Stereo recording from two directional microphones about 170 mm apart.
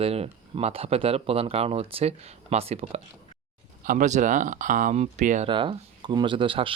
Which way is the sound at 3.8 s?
50° right (ahead or behind).